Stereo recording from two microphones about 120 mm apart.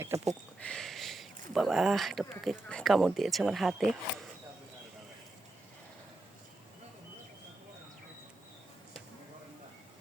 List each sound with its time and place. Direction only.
0.1 s speech: 25° right (ahead or behind)
0.6 s a sound: 5° left (ahead or behind)
1.5 s speech: centre (ahead or behind)